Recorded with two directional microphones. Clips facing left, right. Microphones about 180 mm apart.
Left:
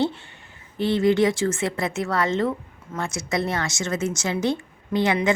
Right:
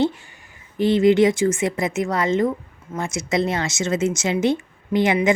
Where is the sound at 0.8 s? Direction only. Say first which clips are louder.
Right 4 dB; 20° right (ahead or behind).